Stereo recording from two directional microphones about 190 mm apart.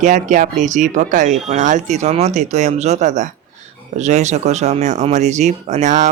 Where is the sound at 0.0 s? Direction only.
40° right (ahead or behind).